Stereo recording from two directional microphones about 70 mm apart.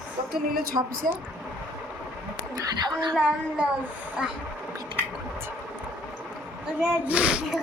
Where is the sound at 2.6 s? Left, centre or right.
Right.